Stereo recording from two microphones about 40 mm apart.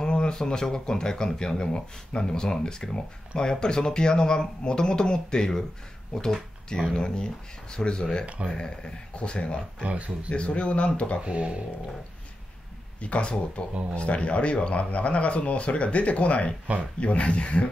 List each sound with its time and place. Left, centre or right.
0.0 s speech: centre
6.9 s speech: centre
9.8 s speech: right
10.3 s speech: left
11.2 s speech: right
13.0 s a man's voice: left
16.7 s speech: right
17.0 s a man's voice: left